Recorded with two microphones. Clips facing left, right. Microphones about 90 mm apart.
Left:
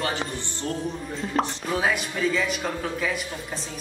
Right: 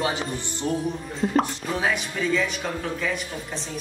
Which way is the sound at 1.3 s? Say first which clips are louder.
Even; centre (ahead or behind).